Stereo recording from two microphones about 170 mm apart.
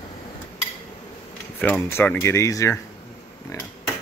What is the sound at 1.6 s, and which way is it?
Speech, 10° left (ahead or behind).